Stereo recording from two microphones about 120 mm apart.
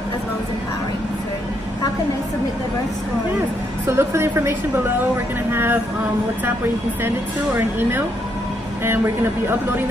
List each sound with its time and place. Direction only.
3.8 s speech: 20° right (ahead or behind)
8.8 s speech: 20° right (ahead or behind)